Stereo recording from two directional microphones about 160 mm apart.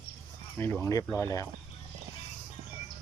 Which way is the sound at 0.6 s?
15° left (ahead or behind).